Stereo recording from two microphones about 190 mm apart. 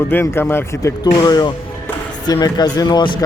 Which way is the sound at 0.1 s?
10° left (ahead or behind).